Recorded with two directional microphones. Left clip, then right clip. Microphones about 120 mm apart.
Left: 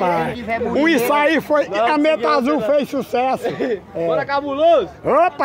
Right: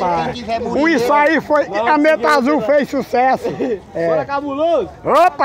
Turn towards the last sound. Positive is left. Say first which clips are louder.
# right 3 dB
turn(degrees=25)  # may be behind; listen again after turning